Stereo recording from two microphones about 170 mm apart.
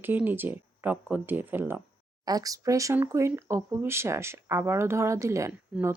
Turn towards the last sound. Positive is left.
turn(degrees=-5)  # may be behind; listen again after turning